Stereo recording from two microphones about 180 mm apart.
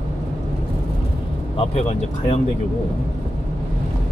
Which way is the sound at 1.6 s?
35° left (ahead or behind).